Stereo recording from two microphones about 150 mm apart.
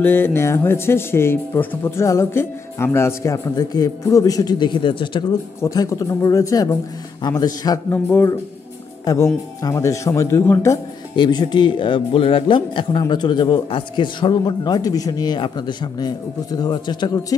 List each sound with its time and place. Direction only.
0.0 s speech: 15° left (ahead or behind); by 5.2 s 35° left (ahead or behind)
5.6 s a man's voice: 20° left (ahead or behind)
11.1 s a man's voice: 30° left (ahead or behind)